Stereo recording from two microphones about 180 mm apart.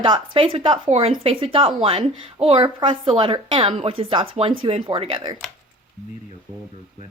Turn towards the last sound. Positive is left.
turn(degrees=-25)  # may be behind; listen again after turning